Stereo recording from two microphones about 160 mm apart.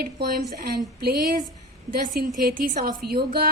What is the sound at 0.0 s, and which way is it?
Speech, 70° right (ahead or behind).